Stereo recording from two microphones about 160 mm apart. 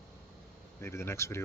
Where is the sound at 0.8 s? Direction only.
15° left (ahead or behind).